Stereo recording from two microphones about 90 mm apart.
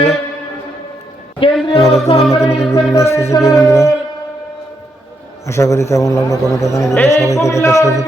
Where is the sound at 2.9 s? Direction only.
30° left (ahead or behind).